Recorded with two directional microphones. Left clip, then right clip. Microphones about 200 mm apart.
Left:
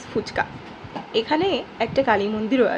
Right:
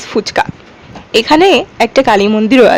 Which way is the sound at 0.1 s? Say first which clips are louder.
Right 11 dB; 50° right (ahead or behind).